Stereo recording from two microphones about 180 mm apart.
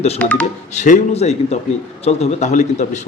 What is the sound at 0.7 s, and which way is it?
Speech, 40° left (ahead or behind).